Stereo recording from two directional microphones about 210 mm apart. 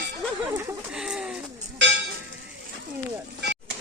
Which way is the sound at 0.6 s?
5° right (ahead or behind).